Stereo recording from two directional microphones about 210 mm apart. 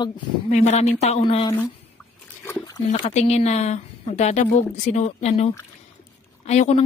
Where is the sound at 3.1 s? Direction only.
30° left (ahead or behind).